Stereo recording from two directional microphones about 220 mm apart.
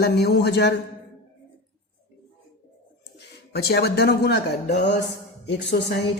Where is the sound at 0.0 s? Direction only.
45° left (ahead or behind).